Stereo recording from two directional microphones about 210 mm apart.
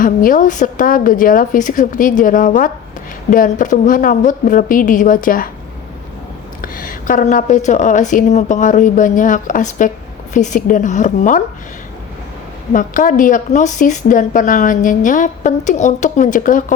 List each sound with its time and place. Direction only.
0.0 s a woman's voice: 40° left (ahead or behind)
6.6 s a woman's voice: 40° left (ahead or behind)
12.7 s a woman's voice: 40° left (ahead or behind)